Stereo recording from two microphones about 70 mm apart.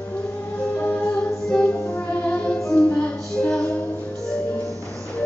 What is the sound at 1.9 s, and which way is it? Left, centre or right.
Music, left.